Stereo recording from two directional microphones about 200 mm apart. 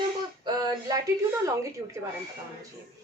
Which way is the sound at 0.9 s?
20° right (ahead or behind).